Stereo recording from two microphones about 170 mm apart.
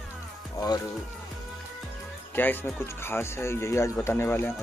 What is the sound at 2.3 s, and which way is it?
Speech, 10° left (ahead or behind).